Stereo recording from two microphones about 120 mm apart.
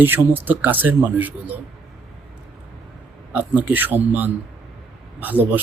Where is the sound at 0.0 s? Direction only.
15° right (ahead or behind).